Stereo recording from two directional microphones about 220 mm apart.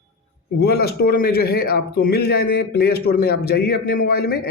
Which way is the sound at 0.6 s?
45° left (ahead or behind).